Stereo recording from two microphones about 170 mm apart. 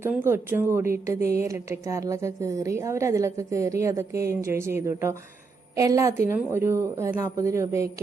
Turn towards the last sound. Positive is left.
turn(degrees=-15)  # may be behind; listen again after turning